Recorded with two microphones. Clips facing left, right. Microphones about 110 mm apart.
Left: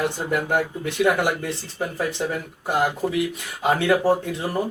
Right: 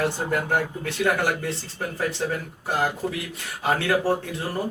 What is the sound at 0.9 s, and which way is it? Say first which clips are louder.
Speech: left 3 dB; 15° left (ahead or behind).